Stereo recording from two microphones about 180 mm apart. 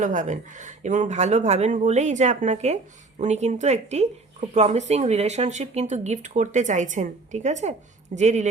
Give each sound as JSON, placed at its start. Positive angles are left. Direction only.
{"t": 0.0, "sound": "speech", "side_deg": -45}